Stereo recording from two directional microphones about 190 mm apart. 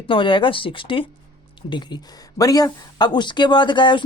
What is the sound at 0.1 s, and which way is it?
Speech, 25° left (ahead or behind).